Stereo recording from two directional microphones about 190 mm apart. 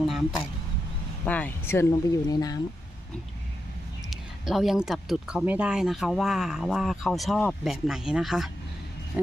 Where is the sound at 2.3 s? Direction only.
20° left (ahead or behind).